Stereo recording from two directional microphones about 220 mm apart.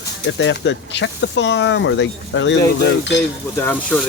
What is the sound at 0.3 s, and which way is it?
Speech, 55° left (ahead or behind).